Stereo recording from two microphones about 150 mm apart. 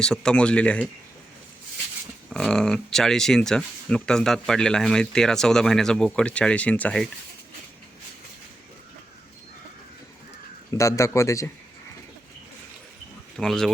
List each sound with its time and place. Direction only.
0.0 s speech: 5° left (ahead or behind)
2.3 s speech: 5° left (ahead or behind)
10.7 s a man's voice: 20° left (ahead or behind)
13.3 s speech: 5° left (ahead or behind)